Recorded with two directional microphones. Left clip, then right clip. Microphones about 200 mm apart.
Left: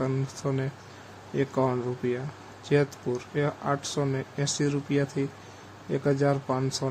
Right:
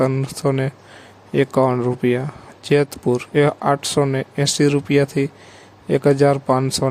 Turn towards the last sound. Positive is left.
turn(degrees=-40)  # may be behind; listen again after turning